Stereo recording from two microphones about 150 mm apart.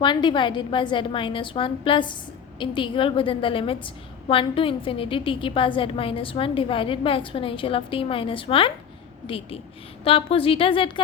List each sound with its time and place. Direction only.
0.0 s a woman's voice: 30° left (ahead or behind)